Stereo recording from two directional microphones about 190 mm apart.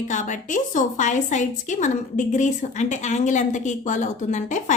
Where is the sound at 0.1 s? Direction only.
40° left (ahead or behind).